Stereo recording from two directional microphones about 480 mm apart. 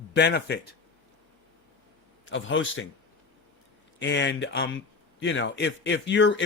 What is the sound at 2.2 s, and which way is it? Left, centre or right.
Speech, left.